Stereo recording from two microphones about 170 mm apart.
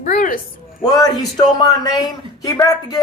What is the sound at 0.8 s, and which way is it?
Speech, 20° left (ahead or behind).